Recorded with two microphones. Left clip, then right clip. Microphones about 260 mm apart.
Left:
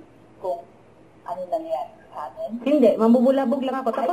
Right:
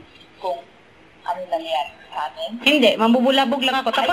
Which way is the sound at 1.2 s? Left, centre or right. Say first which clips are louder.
Right 3 dB; centre.